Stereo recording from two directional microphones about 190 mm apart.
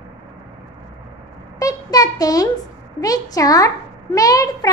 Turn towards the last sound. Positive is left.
turn(degrees=20)  # may be behind; listen again after turning